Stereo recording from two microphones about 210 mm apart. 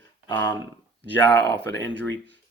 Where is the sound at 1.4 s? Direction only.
55° right (ahead or behind).